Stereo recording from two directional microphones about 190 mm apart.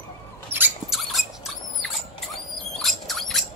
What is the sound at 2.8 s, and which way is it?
Mouse, centre (ahead or behind).